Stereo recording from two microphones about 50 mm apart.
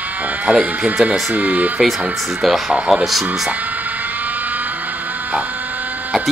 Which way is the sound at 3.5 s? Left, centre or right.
Right.